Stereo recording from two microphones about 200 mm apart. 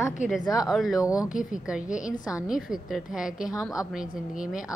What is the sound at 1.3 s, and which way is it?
Speech, 40° left (ahead or behind).